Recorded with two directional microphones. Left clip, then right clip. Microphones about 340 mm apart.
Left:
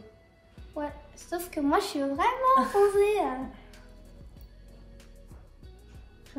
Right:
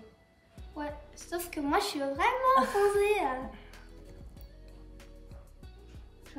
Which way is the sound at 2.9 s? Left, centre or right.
Centre.